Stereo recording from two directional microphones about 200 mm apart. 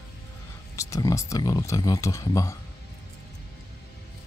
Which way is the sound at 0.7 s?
15° left (ahead or behind).